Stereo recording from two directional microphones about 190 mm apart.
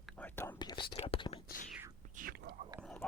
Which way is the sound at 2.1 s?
50° right (ahead or behind).